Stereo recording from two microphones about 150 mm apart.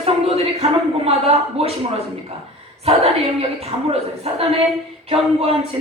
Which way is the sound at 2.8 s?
40° right (ahead or behind).